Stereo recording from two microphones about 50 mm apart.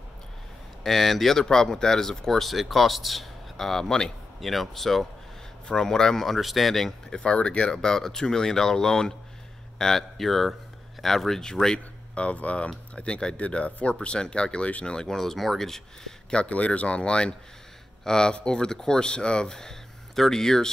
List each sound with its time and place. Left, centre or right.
0.8 s speech: centre
7.2 s speech: centre
12.2 s speech: left; by 15.8 s centre
16.3 s speech: left